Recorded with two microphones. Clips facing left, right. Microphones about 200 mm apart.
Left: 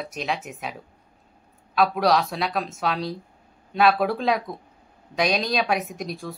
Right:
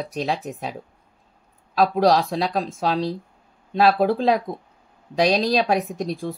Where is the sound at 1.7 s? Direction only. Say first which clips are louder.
Right 3 dB; 35° right (ahead or behind).